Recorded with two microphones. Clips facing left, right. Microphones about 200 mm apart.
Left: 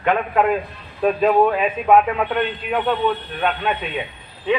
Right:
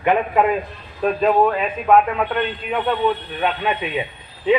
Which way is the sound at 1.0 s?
5° left (ahead or behind).